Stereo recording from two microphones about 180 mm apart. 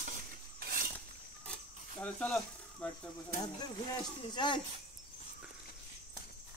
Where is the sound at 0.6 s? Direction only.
55° right (ahead or behind).